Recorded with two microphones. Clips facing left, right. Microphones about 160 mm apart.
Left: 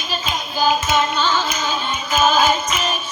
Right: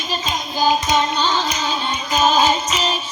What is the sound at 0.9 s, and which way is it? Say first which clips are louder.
Music: even; 35° right (ahead or behind).